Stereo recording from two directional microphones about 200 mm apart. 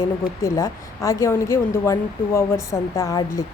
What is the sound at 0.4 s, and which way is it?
Speech, 15° left (ahead or behind).